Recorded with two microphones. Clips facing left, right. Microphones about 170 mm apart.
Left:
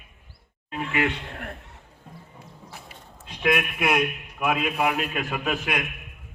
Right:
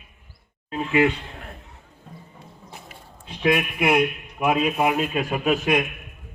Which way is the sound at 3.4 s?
25° right (ahead or behind).